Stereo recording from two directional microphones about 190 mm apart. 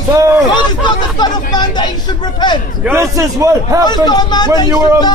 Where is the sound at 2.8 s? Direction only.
15° right (ahead or behind).